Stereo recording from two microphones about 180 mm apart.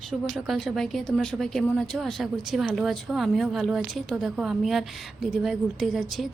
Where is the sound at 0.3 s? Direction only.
Centre (ahead or behind).